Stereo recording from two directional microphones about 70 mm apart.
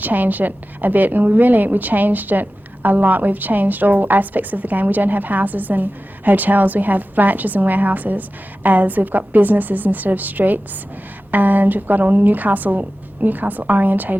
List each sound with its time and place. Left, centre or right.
0.0 s a woman's voice: right